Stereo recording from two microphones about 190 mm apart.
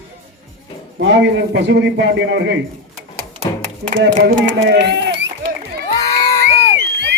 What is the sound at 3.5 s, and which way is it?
Music, 20° left (ahead or behind).